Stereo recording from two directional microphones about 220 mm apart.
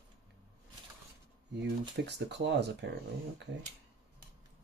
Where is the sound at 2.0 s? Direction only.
50° right (ahead or behind).